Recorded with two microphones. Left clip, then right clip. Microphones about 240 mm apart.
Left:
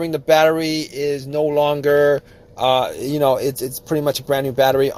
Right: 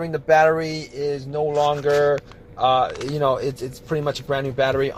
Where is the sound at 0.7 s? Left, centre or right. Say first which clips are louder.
Left 4 dB; left.